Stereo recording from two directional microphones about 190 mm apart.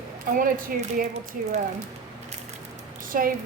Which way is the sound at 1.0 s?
35° right (ahead or behind).